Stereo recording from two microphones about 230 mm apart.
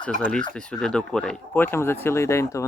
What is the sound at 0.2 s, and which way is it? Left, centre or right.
Speech, centre.